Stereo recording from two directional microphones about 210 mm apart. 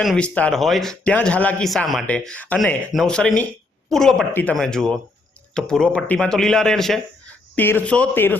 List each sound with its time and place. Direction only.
0.0 s a man's voice: centre (ahead or behind)